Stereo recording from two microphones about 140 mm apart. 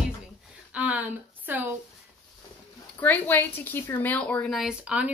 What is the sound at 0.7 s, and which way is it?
Speech, 10° right (ahead or behind).